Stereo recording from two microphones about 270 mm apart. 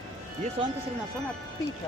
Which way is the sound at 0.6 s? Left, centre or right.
Right.